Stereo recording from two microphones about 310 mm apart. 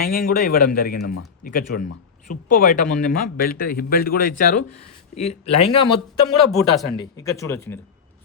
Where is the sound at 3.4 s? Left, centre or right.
Left.